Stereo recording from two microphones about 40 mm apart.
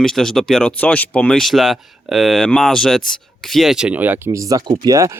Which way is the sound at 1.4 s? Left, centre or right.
Centre.